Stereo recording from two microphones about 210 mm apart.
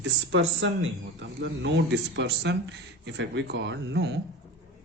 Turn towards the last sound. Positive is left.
turn(degrees=-55)  # may be behind; listen again after turning